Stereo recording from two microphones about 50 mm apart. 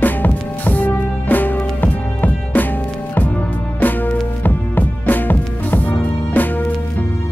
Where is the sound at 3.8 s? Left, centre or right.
Left.